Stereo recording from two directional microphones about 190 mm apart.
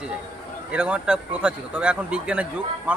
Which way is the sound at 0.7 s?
5° right (ahead or behind).